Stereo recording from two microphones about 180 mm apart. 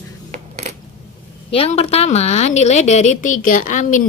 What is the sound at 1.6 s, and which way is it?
A woman's voice, 35° left (ahead or behind).